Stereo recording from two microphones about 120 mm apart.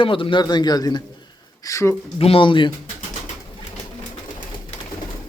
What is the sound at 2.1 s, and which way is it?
Speech, 50° left (ahead or behind).